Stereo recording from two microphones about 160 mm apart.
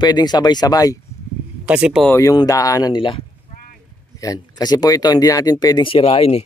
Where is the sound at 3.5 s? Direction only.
45° left (ahead or behind).